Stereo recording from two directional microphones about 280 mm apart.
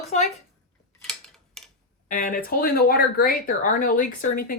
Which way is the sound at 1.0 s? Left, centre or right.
Centre.